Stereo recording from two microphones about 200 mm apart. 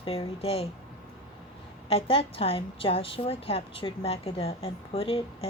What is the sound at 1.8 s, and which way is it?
A woman's voice, 30° left (ahead or behind).